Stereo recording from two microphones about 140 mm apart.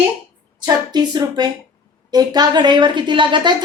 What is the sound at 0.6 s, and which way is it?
A woman's voice, 30° right (ahead or behind).